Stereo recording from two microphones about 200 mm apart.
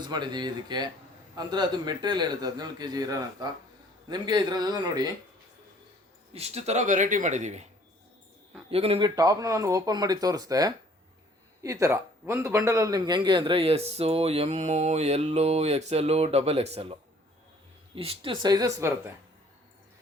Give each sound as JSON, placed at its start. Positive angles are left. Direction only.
{"t": 0.0, "sound": "a man's voice", "side_deg": -20}
{"t": 6.3, "sound": "a man's voice", "side_deg": -30}
{"t": 8.7, "sound": "a man's voice", "side_deg": -30}
{"t": 17.9, "sound": "a man's voice", "side_deg": -25}